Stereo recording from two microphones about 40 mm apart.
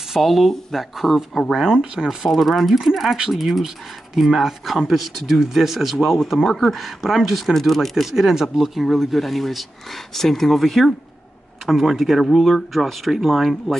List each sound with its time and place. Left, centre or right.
0.2 s speech: centre
1.7 s speech: centre
2.0 s speech: centre
6.0 s speech: centre